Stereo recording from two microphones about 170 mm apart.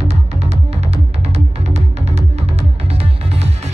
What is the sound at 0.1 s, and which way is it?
Music, 40° right (ahead or behind).